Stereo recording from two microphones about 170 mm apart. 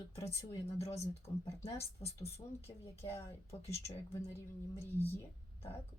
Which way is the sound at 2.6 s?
15° left (ahead or behind).